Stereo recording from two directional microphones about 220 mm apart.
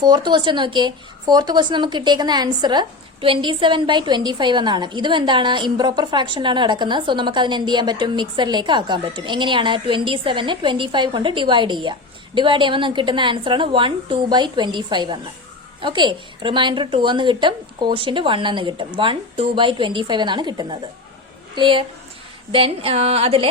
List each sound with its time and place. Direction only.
0.0 s a woman's voice: 20° right (ahead or behind)